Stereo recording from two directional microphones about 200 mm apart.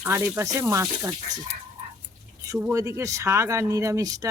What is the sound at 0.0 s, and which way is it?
Speech, 10° right (ahead or behind).